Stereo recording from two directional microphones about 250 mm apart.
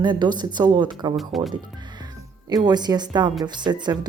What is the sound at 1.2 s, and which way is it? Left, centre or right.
Speech, centre.